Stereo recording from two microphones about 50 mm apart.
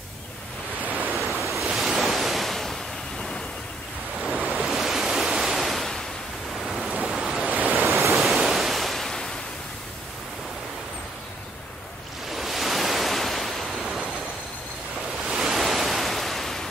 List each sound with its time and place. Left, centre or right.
1.1 s waves: centre
1.8 s ocean: centre
4.2 s waves: centre
4.5 s waves: centre
7.0 s waves: centre
8.1 s ocean: centre
12.4 s waves: centre
15.2 s waves: centre